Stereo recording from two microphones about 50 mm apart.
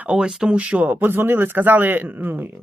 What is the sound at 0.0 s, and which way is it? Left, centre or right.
Speech, centre.